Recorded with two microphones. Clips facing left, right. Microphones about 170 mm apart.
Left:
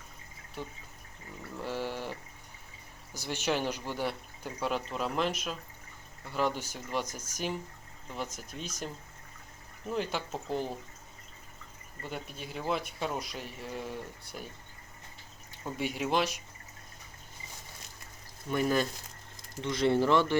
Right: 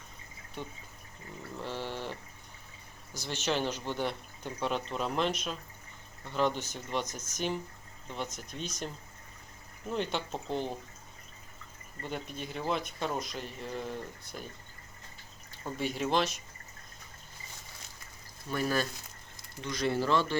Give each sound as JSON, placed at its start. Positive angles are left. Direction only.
{"t": 1.6, "sound": "a sound", "side_deg": 10}
{"t": 3.1, "sound": "speech", "side_deg": 10}
{"t": 9.9, "sound": "speech", "side_deg": 5}
{"t": 12.0, "sound": "speech", "side_deg": 5}
{"t": 15.6, "sound": "speech", "side_deg": 10}
{"t": 18.5, "sound": "speech", "side_deg": 20}